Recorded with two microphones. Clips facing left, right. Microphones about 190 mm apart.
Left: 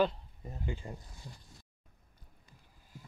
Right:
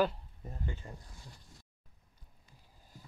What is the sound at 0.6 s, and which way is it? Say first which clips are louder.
Speech: left 4 dB; 15° left (ahead or behind).